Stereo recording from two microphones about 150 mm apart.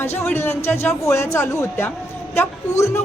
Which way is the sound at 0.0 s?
15° left (ahead or behind).